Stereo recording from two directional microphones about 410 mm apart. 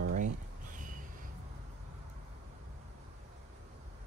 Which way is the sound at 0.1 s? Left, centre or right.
Centre.